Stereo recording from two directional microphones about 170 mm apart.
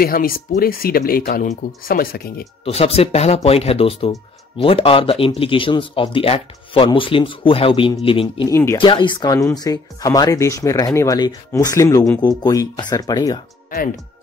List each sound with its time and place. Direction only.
0.0 s speech: 60° left (ahead or behind)
2.6 s speech: 35° left (ahead or behind)
8.5 s speech: 15° left (ahead or behind)
8.7 s speech: 30° left (ahead or behind)